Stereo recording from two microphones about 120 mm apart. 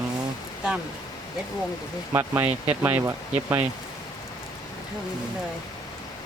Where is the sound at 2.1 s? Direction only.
15° right (ahead or behind).